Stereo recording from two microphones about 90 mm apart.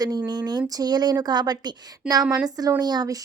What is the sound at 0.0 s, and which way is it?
A woman's voice, 50° right (ahead or behind).